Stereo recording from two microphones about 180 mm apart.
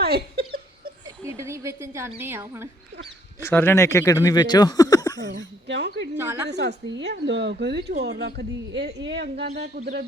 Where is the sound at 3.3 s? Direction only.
15° left (ahead or behind).